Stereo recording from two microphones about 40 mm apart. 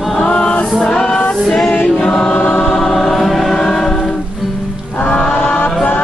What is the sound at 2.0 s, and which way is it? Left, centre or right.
Choir, centre.